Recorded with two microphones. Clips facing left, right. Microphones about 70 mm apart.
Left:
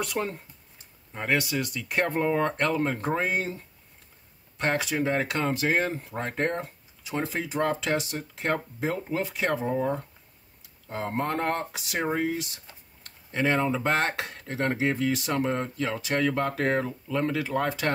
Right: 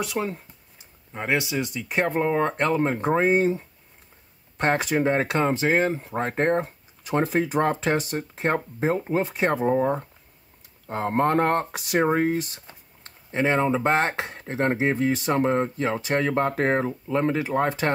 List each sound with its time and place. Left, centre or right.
0.0 s speech: centre
1.1 s speech: centre
4.6 s speech: right
5.0 s speech: right
6.2 s speech: right
7.0 s speech: right
13.0 s speech: right